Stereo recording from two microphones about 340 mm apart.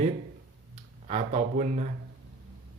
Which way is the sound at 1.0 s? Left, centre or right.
Right.